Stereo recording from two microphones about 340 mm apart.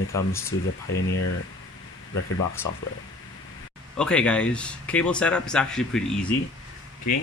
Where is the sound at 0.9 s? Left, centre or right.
Left.